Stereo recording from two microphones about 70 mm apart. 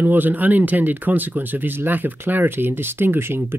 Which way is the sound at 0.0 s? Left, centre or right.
Right.